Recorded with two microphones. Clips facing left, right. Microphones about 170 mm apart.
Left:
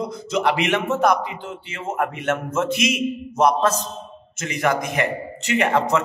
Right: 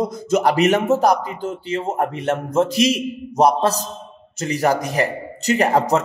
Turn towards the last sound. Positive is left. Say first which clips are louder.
# right 3 dB
turn(degrees=-40)  # may be behind; listen again after turning